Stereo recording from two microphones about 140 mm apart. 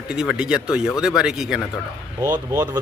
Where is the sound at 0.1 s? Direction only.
5° right (ahead or behind).